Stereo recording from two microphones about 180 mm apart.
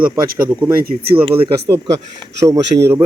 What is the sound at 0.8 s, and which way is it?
Speech, 55° right (ahead or behind).